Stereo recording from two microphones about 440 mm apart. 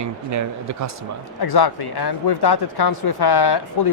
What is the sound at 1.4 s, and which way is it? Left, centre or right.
Speech, left.